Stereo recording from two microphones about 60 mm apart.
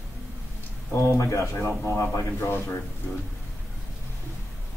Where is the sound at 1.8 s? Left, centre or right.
Left.